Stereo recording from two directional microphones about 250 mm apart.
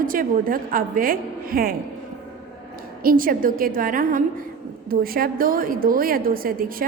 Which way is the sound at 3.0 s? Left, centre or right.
Right.